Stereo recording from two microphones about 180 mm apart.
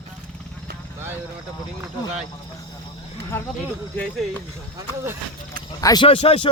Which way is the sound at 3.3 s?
10° left (ahead or behind).